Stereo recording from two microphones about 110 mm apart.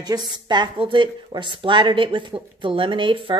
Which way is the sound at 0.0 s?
40° right (ahead or behind).